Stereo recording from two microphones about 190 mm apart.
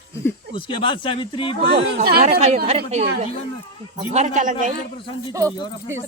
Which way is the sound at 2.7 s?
35° right (ahead or behind).